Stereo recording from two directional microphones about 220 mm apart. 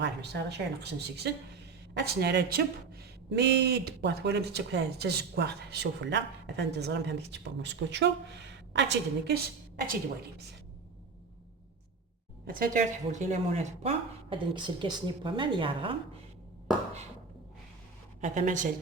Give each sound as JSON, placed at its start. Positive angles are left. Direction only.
{"t": 0.0, "sound": "speech", "side_deg": -50}
{"t": 12.5, "sound": "speech", "side_deg": -40}
{"t": 18.2, "sound": "speech", "side_deg": -35}